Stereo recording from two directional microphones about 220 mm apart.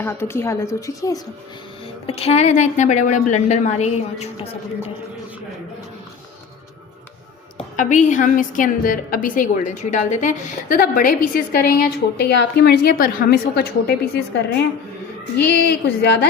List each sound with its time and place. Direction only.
0.0 s a woman's voice: 10° left (ahead or behind)
2.0 s a woman's voice: 25° left (ahead or behind)
7.8 s a woman's voice: 35° left (ahead or behind); by 16.1 s 50° left (ahead or behind)